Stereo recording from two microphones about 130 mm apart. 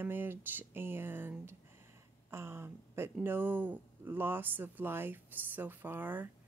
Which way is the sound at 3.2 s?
15° right (ahead or behind).